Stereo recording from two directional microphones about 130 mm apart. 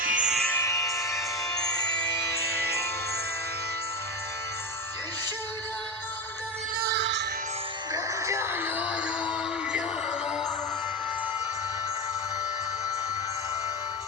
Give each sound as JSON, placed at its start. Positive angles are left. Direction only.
{"t": 0.0, "sound": "music", "side_deg": -90}
{"t": 0.3, "sound": "music", "side_deg": 0}
{"t": 0.5, "sound": "music", "side_deg": 25}
{"t": 7.9, "sound": "music", "side_deg": -20}